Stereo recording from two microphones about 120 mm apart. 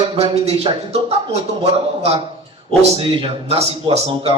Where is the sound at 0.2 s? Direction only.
55° right (ahead or behind).